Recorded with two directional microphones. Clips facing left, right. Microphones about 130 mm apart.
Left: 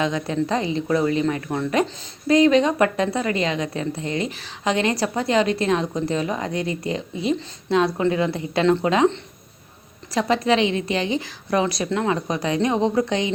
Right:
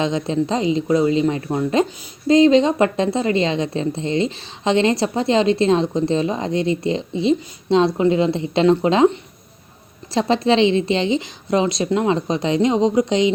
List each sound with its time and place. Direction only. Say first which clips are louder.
0.0 s speech: right 3 dB; 25° right (ahead or behind)
10.2 s speech: right 3 dB; 25° right (ahead or behind)